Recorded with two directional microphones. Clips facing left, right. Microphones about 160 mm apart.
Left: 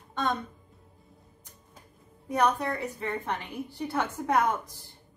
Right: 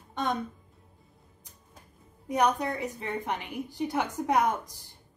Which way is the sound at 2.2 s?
15° right (ahead or behind).